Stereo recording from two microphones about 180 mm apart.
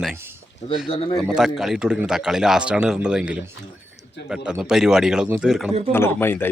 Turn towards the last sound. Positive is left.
turn(degrees=10)  # may be behind; listen again after turning